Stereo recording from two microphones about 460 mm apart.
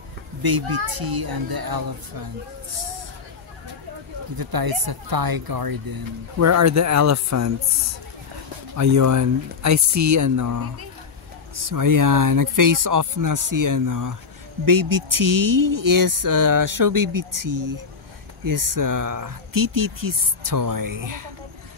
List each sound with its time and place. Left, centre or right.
0.4 s a child's voice: right
0.7 s a child's voice: right
0.9 s speech: right
4.4 s speech: right
6.4 s speech: right
8.7 s speech: right